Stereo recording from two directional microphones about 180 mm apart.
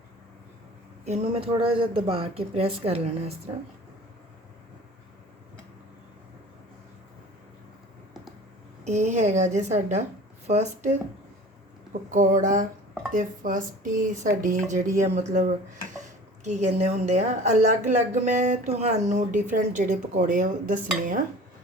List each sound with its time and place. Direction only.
1.0 s a woman's voice: 35° right (ahead or behind)
8.8 s a woman's voice: 40° right (ahead or behind)
12.1 s a woman's voice: 45° right (ahead or behind)